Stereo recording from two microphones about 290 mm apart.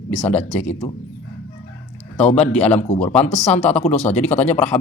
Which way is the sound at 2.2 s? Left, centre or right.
Left.